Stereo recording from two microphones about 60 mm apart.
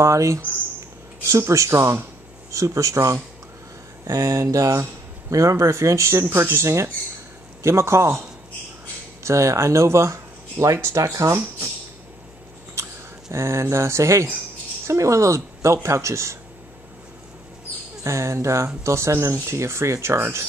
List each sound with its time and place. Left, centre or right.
0.0 s a woman's voice: right
2.5 s a woman's voice: right
6.2 s speech: right
12.8 s a sound: right
13.3 s a woman's voice: right
18.0 s a woman's voice: right